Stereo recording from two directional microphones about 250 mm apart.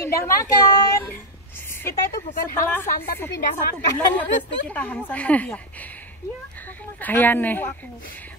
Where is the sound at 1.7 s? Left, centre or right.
Centre.